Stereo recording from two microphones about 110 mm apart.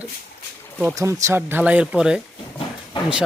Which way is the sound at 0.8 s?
25° right (ahead or behind).